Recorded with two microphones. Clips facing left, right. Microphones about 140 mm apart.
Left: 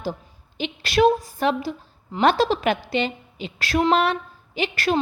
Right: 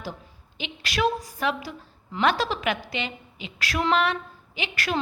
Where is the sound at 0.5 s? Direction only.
35° left (ahead or behind).